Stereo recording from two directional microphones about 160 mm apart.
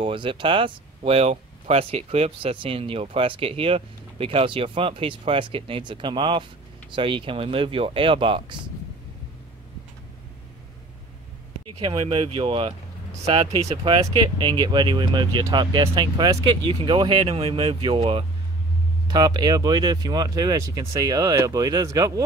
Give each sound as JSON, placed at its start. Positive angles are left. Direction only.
{"t": 0.0, "sound": "speech", "side_deg": -30}
{"t": 11.8, "sound": "speech", "side_deg": -30}